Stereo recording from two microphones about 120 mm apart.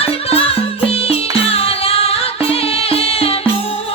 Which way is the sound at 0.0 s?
55° left (ahead or behind).